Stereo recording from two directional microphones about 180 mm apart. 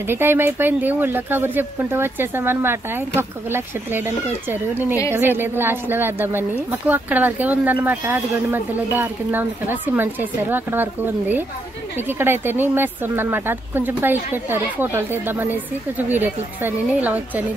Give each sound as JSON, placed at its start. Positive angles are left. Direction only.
{"t": 0.0, "sound": "a woman's voice", "side_deg": -10}